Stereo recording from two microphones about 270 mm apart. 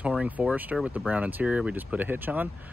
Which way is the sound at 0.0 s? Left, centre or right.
Centre.